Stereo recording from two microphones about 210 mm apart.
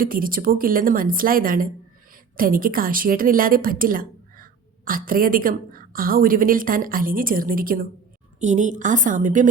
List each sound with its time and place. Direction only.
0.0 s a woman's voice: 40° right (ahead or behind)